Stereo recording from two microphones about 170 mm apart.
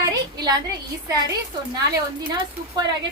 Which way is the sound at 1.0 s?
20° right (ahead or behind).